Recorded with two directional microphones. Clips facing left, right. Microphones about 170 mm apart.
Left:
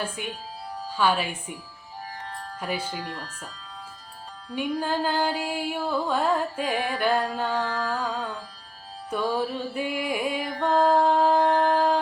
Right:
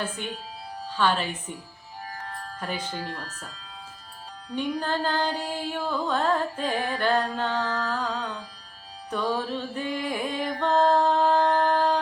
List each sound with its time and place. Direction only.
0.9 s music: 10° left (ahead or behind)
2.6 s music: 10° left (ahead or behind)
2.9 s speech: 45° right (ahead or behind)
4.5 s music: 10° left (ahead or behind)